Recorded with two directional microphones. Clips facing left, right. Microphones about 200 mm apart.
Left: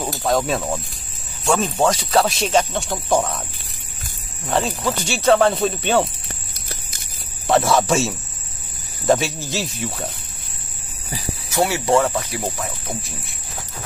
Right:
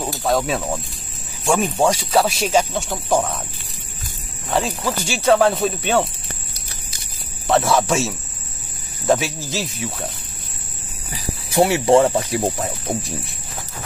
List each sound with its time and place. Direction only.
0.0 s speech: centre (ahead or behind)
1.4 s speech: 15° right (ahead or behind)
4.5 s speech: 5° right (ahead or behind)
7.4 s speech: 5° left (ahead or behind)
11.5 s speech: 20° right (ahead or behind)